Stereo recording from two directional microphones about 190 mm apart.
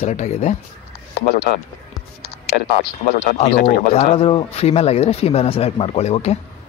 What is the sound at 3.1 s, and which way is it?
Speech, 35° left (ahead or behind).